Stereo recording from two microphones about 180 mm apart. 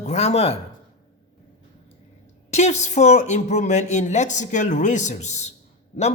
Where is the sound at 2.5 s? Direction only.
40° left (ahead or behind).